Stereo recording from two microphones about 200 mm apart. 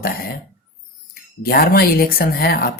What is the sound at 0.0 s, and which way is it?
Dog, 50° left (ahead or behind).